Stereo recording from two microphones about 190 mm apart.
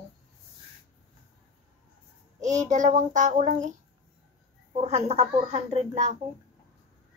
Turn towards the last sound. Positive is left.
turn(degrees=-35)  # may be behind; listen again after turning